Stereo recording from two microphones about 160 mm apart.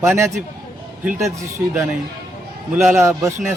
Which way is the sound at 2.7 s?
15° right (ahead or behind).